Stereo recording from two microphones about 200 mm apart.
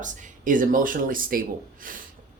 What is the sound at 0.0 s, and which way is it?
Speech, 40° right (ahead or behind).